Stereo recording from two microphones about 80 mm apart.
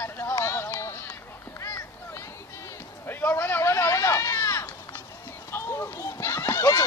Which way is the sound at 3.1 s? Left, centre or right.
Left.